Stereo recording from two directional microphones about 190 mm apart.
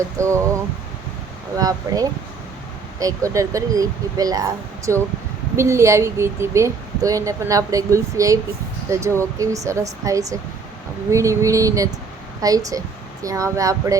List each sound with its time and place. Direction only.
0.2 s speech: 15° right (ahead or behind)
1.5 s speech: 20° right (ahead or behind)